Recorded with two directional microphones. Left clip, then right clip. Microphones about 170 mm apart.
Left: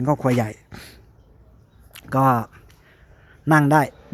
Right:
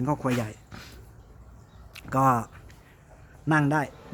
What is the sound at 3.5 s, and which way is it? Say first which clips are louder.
Speech: left 8 dB; 35° left (ahead or behind).